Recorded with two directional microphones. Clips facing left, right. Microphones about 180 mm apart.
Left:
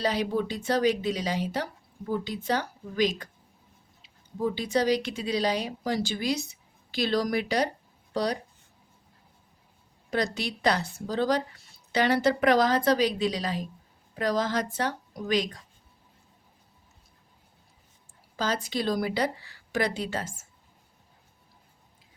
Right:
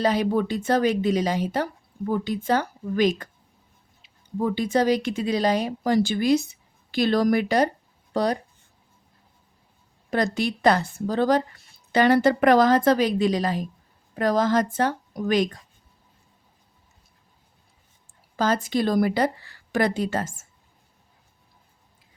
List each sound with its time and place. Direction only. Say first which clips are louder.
0.0 s speech: right 5 dB; 50° right (ahead or behind)
4.4 s speech: right 4 dB; 55° right (ahead or behind)
10.1 s speech: right 5 dB; 50° right (ahead or behind)
18.3 s speech: right 6 dB; 50° right (ahead or behind)